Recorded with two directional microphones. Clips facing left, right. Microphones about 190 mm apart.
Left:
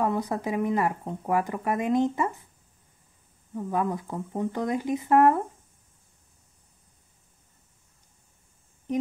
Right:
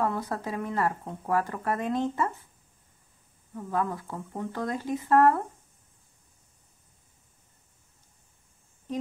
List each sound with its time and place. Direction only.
0.0 s speech: 15° left (ahead or behind)
3.5 s speech: 15° left (ahead or behind)